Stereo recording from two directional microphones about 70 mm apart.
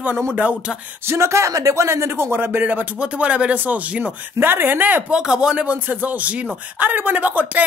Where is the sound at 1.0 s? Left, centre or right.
Right.